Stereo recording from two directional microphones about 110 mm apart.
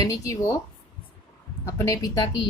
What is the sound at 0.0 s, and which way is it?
Speech, 30° left (ahead or behind).